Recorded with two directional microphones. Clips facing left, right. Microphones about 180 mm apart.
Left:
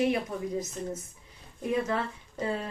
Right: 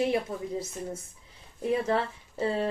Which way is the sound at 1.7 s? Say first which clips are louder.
Right 2 dB; 30° right (ahead or behind).